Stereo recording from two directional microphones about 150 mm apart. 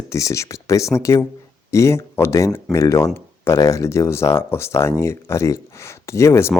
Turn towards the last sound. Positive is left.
turn(degrees=15)  # may be behind; listen again after turning